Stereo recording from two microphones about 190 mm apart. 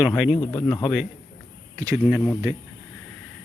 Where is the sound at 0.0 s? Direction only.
5° right (ahead or behind).